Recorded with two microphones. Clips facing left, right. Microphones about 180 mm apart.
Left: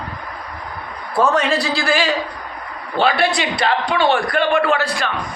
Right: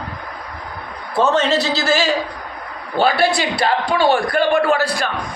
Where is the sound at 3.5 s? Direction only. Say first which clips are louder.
Right 1 dB; 5° right (ahead or behind).